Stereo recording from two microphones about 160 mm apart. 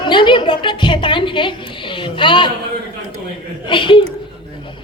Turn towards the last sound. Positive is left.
turn(degrees=30)  # may be behind; listen again after turning